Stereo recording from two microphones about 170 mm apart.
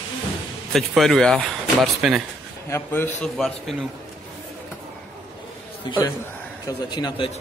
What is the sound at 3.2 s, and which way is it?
Speech, centre (ahead or behind).